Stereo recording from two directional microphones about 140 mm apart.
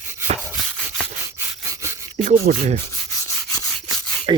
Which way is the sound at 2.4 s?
55° right (ahead or behind).